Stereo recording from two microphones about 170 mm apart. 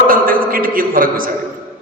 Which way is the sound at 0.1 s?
55° right (ahead or behind).